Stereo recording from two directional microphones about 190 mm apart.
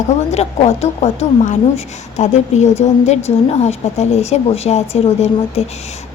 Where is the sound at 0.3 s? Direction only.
35° left (ahead or behind).